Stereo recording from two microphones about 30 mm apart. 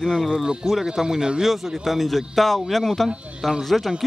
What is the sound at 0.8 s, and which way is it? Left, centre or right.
Speech, centre.